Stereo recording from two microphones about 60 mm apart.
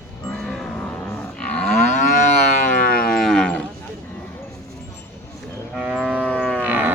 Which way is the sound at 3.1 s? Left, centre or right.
Centre.